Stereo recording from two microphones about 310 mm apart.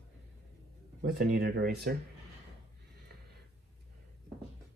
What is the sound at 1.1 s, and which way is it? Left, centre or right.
Speech, right.